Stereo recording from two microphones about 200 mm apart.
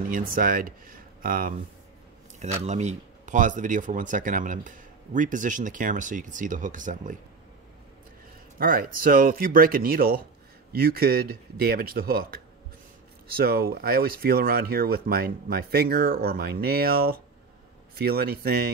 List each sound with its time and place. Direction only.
0.1 s speech: 45° right (ahead or behind)
8.5 s speech: 45° right (ahead or behind)
13.4 s speech: 50° right (ahead or behind)